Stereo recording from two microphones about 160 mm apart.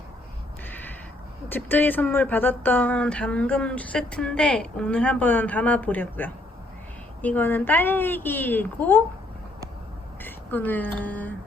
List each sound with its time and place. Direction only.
0.7 s a sound: 10° left (ahead or behind)
1.5 s speech: 10° left (ahead or behind)
10.2 s a woman's voice: 10° left (ahead or behind)